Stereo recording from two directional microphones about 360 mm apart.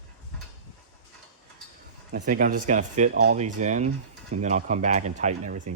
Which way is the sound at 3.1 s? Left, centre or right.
Right.